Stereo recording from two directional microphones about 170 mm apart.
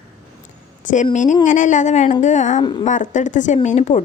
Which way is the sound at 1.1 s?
45° left (ahead or behind).